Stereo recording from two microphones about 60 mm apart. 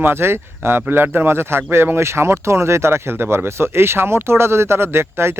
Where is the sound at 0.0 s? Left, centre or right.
Right.